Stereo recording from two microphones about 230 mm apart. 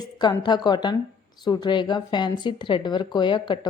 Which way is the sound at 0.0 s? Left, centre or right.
Centre.